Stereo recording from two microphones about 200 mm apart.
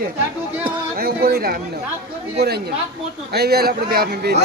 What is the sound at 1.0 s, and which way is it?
A man's voice, 50° right (ahead or behind).